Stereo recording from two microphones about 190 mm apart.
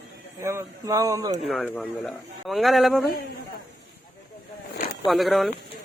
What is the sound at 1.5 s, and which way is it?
A man's voice, centre (ahead or behind).